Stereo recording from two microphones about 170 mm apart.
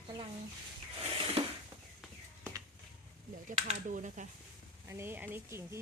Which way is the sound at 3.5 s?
50° right (ahead or behind).